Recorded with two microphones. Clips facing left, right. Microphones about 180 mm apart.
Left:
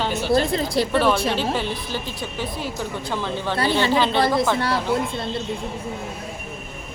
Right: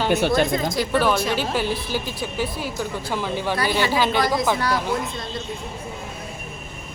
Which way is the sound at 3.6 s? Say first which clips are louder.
Left 3 dB; 25° left (ahead or behind).